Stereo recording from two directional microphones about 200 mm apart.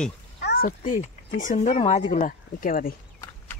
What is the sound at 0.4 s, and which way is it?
Speech, 50° left (ahead or behind).